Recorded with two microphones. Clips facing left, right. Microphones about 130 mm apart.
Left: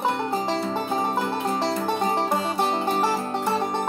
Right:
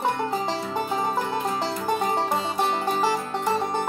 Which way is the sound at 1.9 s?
Centre (ahead or behind).